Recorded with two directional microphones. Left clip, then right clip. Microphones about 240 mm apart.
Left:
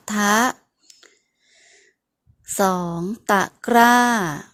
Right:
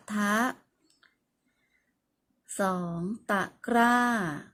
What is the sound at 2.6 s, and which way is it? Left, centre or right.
A woman's voice, left.